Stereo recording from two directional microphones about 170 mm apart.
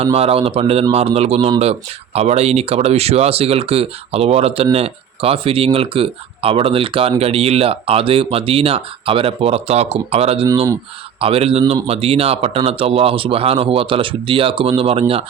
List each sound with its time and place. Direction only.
0.0 s speech: 35° right (ahead or behind)